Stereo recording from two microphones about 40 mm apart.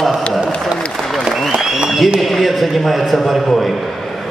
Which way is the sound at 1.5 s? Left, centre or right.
Centre.